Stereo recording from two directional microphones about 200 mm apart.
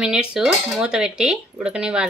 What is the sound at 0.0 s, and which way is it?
Speech, 5° right (ahead or behind).